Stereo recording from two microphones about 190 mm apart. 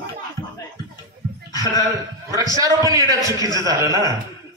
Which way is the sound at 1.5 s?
20° left (ahead or behind).